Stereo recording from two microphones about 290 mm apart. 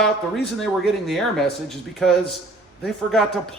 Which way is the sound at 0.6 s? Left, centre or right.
Centre.